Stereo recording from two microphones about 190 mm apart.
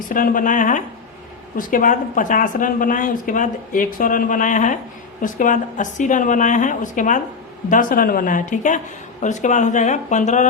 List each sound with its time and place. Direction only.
0.1 s a woman's voice: 45° left (ahead or behind)